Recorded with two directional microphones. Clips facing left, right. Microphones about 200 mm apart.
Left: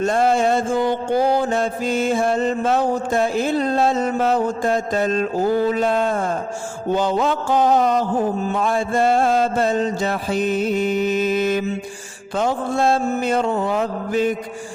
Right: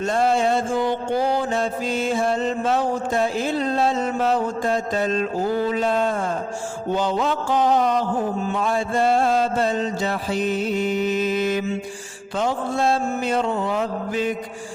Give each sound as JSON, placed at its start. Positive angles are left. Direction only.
{"t": 0.0, "sound": "music", "side_deg": 50}